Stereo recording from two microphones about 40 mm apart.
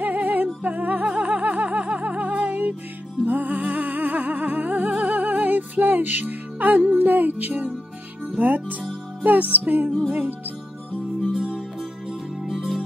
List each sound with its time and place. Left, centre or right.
0.0 s music: right
10.0 s music: right
12.1 s music: centre